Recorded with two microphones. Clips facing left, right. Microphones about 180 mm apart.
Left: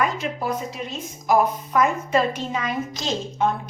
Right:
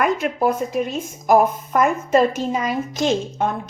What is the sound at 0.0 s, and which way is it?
A woman's voice, 55° right (ahead or behind).